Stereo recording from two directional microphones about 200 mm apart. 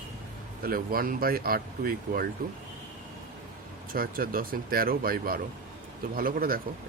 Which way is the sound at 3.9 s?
45° right (ahead or behind).